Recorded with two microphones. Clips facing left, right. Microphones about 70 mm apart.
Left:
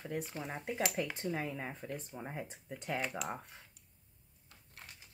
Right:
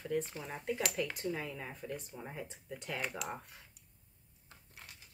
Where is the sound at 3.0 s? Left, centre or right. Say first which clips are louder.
Left 1 dB; centre.